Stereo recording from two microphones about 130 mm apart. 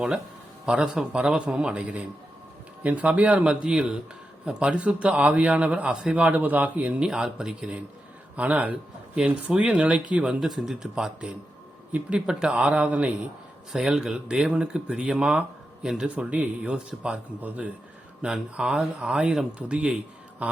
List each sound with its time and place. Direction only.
0.6 s speech: 5° right (ahead or behind)
20.4 s mantra: 10° right (ahead or behind)